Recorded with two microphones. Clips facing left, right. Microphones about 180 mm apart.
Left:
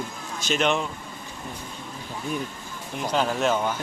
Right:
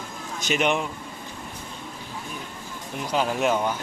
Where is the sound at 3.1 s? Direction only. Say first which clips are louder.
Even; 10° right (ahead or behind).